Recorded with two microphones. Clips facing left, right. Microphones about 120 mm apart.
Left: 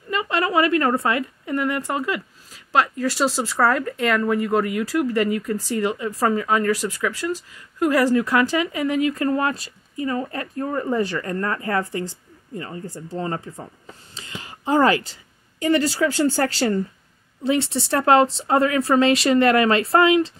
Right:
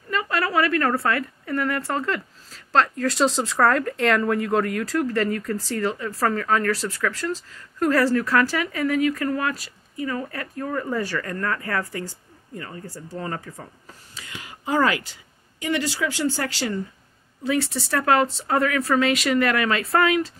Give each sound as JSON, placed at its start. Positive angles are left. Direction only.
{"t": 0.1, "sound": "a woman's voice", "side_deg": 20}
{"t": 14.1, "sound": "whispering", "side_deg": 25}
{"t": 15.6, "sound": "a woman's voice", "side_deg": 40}
{"t": 17.5, "sound": "speech", "side_deg": 25}